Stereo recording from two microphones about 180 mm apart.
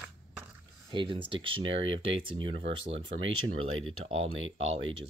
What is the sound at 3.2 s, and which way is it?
Speech, 90° right.